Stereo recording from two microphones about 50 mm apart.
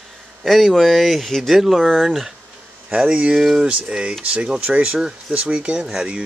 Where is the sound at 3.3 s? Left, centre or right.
Centre.